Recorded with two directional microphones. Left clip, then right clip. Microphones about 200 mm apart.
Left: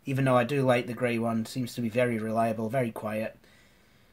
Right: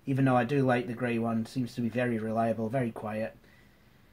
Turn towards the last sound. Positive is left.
turn(degrees=40)  # may be behind; listen again after turning